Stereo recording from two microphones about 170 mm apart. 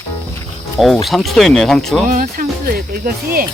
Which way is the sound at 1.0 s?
Centre (ahead or behind).